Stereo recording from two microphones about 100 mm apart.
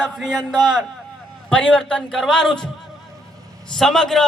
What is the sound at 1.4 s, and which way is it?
A man's voice, 10° left (ahead or behind).